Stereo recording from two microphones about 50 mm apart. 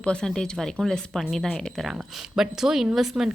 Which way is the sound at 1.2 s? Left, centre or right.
Centre.